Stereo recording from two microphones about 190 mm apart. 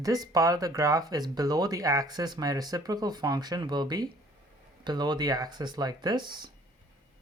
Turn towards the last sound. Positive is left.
turn(degrees=-25)  # may be behind; listen again after turning